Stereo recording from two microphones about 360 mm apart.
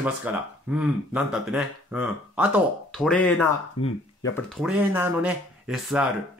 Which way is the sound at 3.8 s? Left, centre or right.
Left.